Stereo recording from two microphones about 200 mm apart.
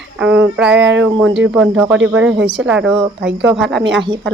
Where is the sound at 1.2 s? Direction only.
70° right (ahead or behind).